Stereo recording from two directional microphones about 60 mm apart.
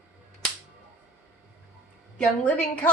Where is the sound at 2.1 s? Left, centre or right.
Centre.